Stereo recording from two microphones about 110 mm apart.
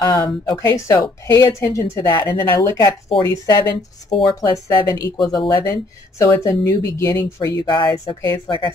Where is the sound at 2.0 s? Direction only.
40° left (ahead or behind).